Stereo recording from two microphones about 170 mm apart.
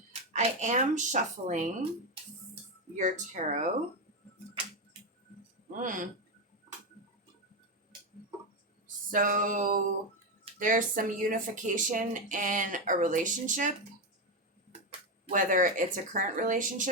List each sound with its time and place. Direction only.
0.1 s speech: 45° right (ahead or behind)
2.9 s speech: 45° right (ahead or behind)
5.7 s speech: 50° right (ahead or behind)
9.0 s speech: 50° right (ahead or behind)
15.3 s speech: 50° right (ahead or behind)